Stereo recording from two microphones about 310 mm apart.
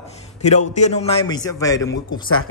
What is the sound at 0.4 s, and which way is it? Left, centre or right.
Speech, left.